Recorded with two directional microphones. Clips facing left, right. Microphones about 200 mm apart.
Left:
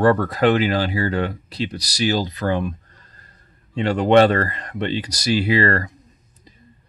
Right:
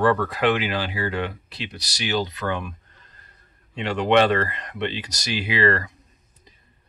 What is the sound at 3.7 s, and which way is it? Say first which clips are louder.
Speech: left 5 dB; 40° left (ahead or behind).